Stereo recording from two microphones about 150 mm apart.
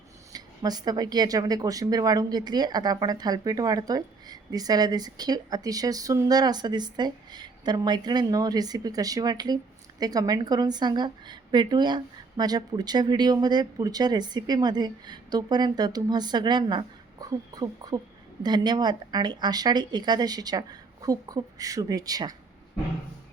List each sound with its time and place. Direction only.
0.3 s speech: 25° right (ahead or behind)